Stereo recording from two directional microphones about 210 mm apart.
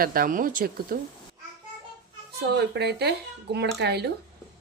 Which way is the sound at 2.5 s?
50° right (ahead or behind).